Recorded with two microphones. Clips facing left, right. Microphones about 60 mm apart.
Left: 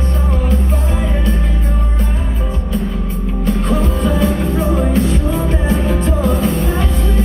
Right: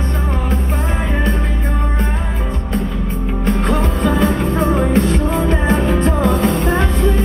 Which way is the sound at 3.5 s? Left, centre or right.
Right.